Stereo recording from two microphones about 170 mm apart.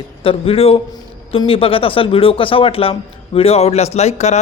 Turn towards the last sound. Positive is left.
turn(degrees=40)  # may be behind; listen again after turning